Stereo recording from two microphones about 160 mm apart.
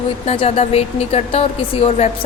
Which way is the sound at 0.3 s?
40° left (ahead or behind).